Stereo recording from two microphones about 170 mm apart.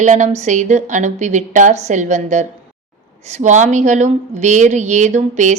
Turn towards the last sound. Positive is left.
turn(degrees=-45)  # may be behind; listen again after turning